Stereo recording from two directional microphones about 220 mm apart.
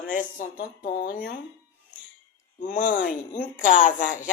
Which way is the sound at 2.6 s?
35° left (ahead or behind).